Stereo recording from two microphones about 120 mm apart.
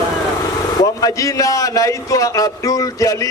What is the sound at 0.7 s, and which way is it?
A man's voice, 30° left (ahead or behind).